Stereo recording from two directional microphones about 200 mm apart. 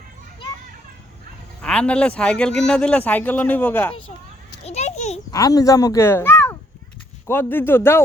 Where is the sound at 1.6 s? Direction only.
5° left (ahead or behind).